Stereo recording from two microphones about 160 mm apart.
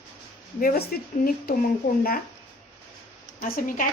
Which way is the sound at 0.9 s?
65° left (ahead or behind).